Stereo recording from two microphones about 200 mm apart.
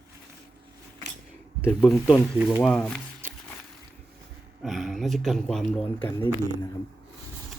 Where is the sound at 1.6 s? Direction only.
5° left (ahead or behind).